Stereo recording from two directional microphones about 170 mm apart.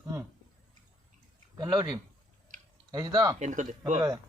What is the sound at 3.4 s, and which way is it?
Speech, 45° right (ahead or behind).